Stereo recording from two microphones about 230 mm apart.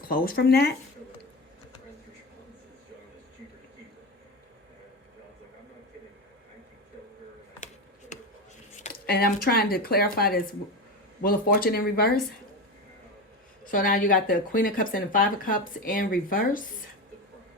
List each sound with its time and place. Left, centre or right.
0.0 s speech: left
8.8 s speech: left
13.7 s speech: left